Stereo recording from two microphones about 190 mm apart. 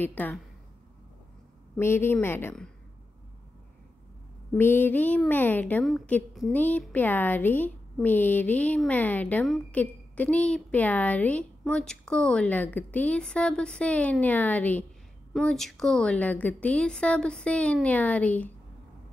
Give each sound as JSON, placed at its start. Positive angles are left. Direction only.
{"t": 0.0, "sound": "a woman's voice", "side_deg": 10}
{"t": 1.8, "sound": "a woman's voice", "side_deg": 10}
{"t": 4.6, "sound": "a woman's voice", "side_deg": 10}